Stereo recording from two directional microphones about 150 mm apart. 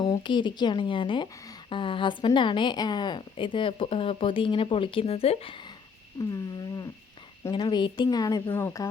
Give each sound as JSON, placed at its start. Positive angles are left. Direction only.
{"t": 0.0, "sound": "a woman's voice", "side_deg": 30}